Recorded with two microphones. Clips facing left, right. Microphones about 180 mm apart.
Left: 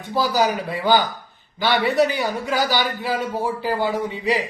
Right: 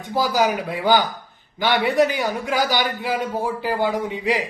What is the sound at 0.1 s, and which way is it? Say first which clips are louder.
A man's voice: even; 15° right (ahead or behind).